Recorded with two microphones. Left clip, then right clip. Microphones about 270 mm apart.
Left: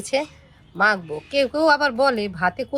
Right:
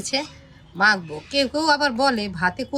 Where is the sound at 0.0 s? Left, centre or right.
Left.